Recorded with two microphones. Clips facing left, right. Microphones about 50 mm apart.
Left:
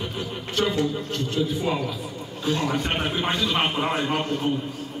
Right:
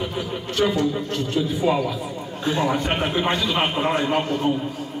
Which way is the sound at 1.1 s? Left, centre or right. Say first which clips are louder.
Right 2 dB; centre.